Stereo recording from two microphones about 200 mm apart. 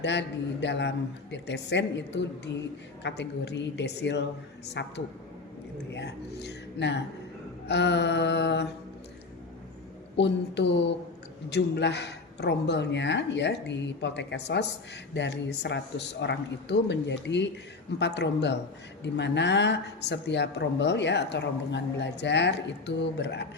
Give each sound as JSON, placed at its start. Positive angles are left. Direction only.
{"t": 0.0, "sound": "speech", "side_deg": 60}
{"t": 10.2, "sound": "speech", "side_deg": 60}